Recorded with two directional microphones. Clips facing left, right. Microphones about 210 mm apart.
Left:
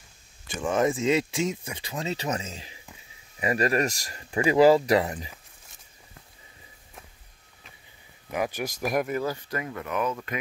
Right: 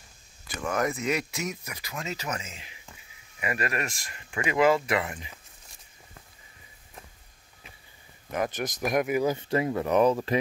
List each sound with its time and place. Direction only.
0.7 s speech: 25° left (ahead or behind)
8.3 s speech: 10° left (ahead or behind)
9.1 s speech: 20° right (ahead or behind); by 10.3 s 35° right (ahead or behind)